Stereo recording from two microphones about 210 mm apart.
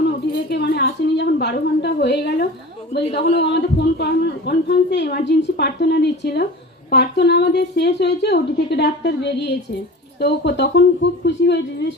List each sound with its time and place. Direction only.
0.5 s a woman's voice: 50° left (ahead or behind)
3.0 s a man's voice: 30° left (ahead or behind)
3.5 s a woman's voice: 50° left (ahead or behind)